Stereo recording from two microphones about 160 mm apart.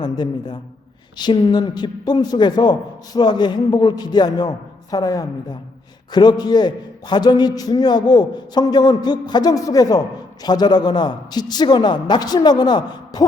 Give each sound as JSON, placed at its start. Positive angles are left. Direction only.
{"t": 0.0, "sound": "a man's voice", "side_deg": 25}